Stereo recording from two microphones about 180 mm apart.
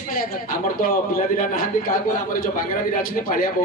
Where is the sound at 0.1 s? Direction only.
50° left (ahead or behind).